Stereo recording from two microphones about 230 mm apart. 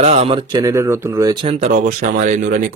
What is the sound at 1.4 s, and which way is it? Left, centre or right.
Speech, right.